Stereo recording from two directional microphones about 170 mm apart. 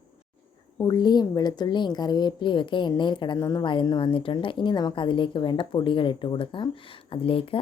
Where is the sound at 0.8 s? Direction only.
25° left (ahead or behind).